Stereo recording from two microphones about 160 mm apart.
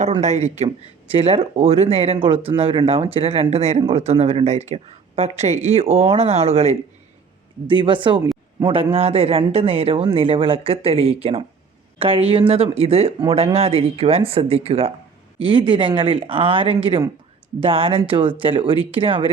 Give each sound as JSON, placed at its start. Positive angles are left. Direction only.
{"t": 0.0, "sound": "speech", "side_deg": -45}